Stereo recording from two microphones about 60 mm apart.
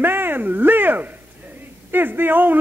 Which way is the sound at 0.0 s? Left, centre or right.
Right.